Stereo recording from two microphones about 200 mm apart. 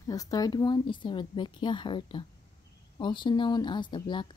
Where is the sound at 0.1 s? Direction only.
20° left (ahead or behind).